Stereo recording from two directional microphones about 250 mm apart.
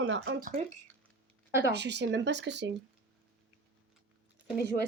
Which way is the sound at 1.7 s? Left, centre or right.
Right.